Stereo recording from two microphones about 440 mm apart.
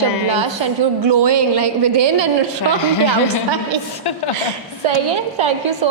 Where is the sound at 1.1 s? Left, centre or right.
Right.